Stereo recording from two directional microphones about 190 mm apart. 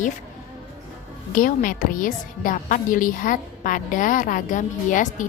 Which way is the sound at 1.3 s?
45° left (ahead or behind).